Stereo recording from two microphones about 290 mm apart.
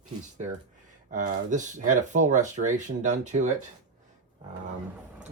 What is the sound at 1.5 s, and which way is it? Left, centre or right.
Speech, right.